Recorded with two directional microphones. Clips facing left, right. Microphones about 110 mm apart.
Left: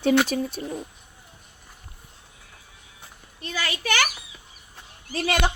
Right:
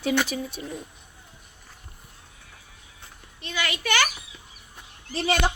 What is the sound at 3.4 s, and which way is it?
Speech, 35° left (ahead or behind).